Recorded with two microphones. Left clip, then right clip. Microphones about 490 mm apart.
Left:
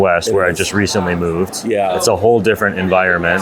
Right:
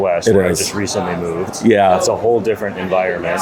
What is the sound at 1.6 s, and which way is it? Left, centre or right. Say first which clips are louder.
Speech: right 6 dB; right.